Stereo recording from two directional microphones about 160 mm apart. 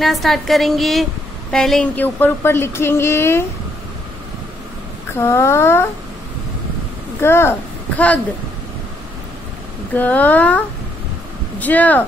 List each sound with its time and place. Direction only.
0.0 s a woman's voice: centre (ahead or behind)
5.1 s speech: 15° left (ahead or behind)
7.2 s speech: 15° left (ahead or behind)
9.9 s speech: 10° left (ahead or behind)
11.6 s speech: 10° left (ahead or behind)